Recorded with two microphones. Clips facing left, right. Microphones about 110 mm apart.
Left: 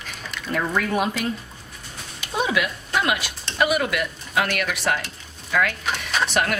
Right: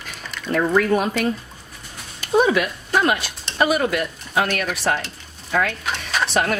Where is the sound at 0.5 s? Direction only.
35° right (ahead or behind).